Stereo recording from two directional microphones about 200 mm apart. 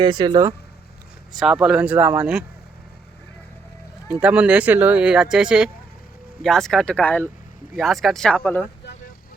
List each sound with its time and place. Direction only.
0.0 s speech: 20° right (ahead or behind)
1.4 s speech: centre (ahead or behind)
4.1 s speech: 5° right (ahead or behind)